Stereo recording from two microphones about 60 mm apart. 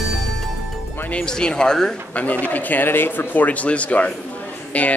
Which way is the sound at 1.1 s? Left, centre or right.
Centre.